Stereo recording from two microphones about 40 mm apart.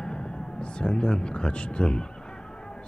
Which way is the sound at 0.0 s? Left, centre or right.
Left.